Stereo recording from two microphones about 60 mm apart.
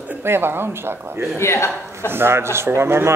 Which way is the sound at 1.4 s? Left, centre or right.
Left.